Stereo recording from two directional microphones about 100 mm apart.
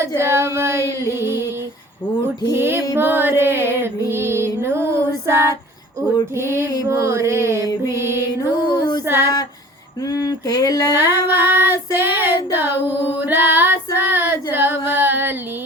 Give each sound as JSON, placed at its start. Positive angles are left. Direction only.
{"t": 0.2, "sound": "child singing", "side_deg": -25}
{"t": 1.2, "sound": "female singing", "side_deg": -25}
{"t": 2.5, "sound": "music", "side_deg": -25}
{"t": 6.3, "sound": "child singing", "side_deg": -25}
{"t": 6.8, "sound": "mantra", "side_deg": -25}
{"t": 7.9, "sound": "music", "side_deg": -25}
{"t": 8.6, "sound": "female singing", "side_deg": 50}
{"t": 10.1, "sound": "a sound", "side_deg": 35}
{"t": 10.9, "sound": "child singing", "side_deg": -20}